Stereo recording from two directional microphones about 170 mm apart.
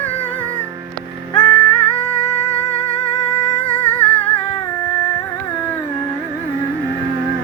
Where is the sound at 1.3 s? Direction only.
30° left (ahead or behind).